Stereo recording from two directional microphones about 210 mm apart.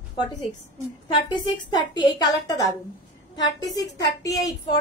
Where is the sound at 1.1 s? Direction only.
20° left (ahead or behind).